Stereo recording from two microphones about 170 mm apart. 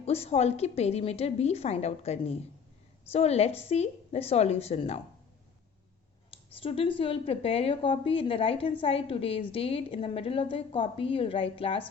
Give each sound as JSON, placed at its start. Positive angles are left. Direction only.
{"t": 0.0, "sound": "a woman's voice", "side_deg": 40}
{"t": 6.3, "sound": "a sound", "side_deg": 35}
{"t": 7.0, "sound": "a woman's voice", "side_deg": 35}